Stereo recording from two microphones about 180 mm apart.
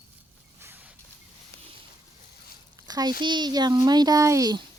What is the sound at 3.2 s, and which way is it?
A child's voice, 25° right (ahead or behind).